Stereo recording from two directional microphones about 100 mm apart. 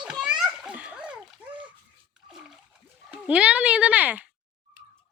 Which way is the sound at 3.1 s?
10° right (ahead or behind).